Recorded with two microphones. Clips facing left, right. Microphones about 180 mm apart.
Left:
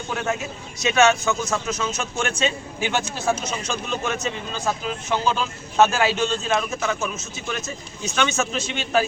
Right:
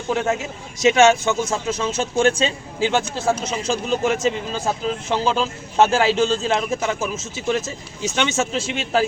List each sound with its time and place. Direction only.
0.8 s speech: 25° right (ahead or behind)